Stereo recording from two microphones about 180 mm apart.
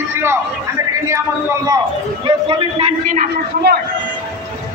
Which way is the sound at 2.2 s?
30° right (ahead or behind).